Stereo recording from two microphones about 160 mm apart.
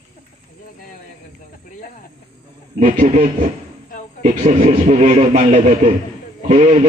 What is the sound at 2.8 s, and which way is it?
A man's voice, 55° right (ahead or behind).